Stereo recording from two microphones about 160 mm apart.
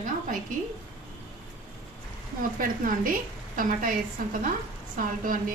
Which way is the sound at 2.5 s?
60° right (ahead or behind).